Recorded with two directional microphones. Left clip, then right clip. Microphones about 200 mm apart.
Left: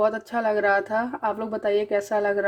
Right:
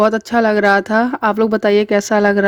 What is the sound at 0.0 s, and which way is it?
Speech, 35° right (ahead or behind).